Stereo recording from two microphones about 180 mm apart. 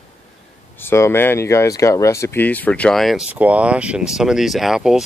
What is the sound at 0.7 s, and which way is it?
Speech, 15° left (ahead or behind).